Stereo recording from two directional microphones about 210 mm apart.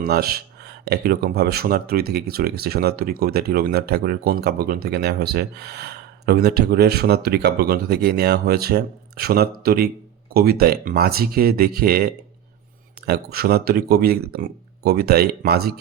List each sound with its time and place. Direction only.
0.0 s speech: 45° right (ahead or behind)